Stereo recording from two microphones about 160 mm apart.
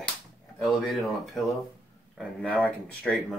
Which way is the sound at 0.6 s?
Centre (ahead or behind).